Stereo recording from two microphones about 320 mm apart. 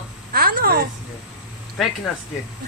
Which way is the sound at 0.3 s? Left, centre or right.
Right.